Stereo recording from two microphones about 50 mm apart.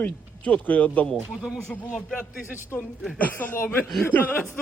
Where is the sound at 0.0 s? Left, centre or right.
Left.